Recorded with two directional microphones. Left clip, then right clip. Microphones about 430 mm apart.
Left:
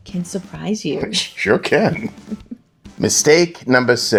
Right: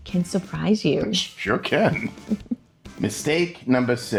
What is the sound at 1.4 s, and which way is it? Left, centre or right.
Speech, centre.